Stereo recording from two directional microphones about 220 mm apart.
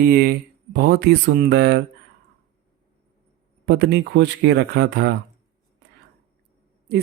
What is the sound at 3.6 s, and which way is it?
Speech, 50° right (ahead or behind).